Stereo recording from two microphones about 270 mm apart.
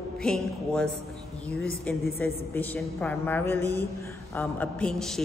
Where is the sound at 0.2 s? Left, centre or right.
Centre.